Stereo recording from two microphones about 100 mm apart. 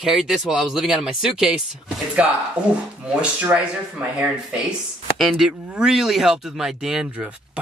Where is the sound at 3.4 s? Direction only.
15° right (ahead or behind).